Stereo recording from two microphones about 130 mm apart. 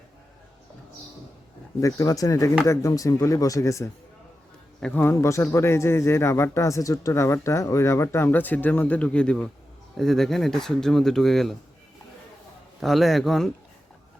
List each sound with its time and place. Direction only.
1.8 s speech: 25° left (ahead or behind)
4.8 s speech: 10° left (ahead or behind)
12.8 s speech: centre (ahead or behind)